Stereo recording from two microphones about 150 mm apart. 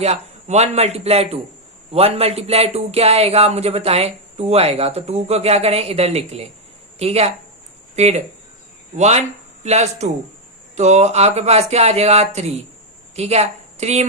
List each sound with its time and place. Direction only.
0.0 s a woman's voice: 45° right (ahead or behind)